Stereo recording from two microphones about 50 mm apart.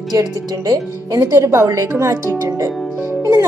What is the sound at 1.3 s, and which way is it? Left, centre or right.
A woman's voice, right.